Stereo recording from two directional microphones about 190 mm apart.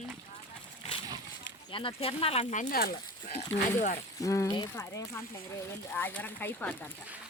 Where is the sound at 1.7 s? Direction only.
30° left (ahead or behind); by 3.0 s 50° left (ahead or behind).